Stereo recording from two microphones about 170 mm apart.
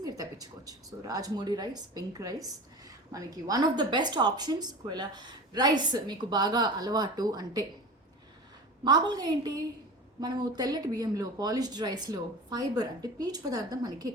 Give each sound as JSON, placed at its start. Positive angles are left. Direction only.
{"t": 0.0, "sound": "a woman's voice", "side_deg": -20}
{"t": 8.8, "sound": "a woman's voice", "side_deg": -25}